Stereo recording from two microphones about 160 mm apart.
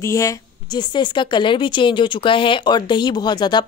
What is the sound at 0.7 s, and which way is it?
A woman's voice, 30° left (ahead or behind).